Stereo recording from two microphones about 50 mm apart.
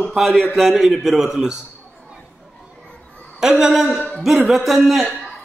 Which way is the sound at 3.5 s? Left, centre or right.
Centre.